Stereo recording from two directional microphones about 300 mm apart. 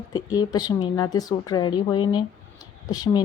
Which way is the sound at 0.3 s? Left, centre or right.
Centre.